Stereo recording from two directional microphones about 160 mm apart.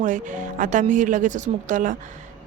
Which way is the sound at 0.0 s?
50° right (ahead or behind).